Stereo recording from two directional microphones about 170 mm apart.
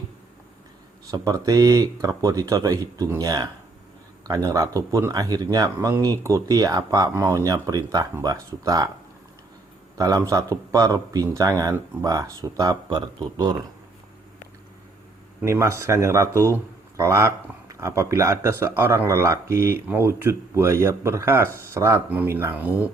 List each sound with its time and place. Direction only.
1.1 s speech: 20° right (ahead or behind)
10.0 s speech: 20° right (ahead or behind)
15.4 s speech: 15° right (ahead or behind)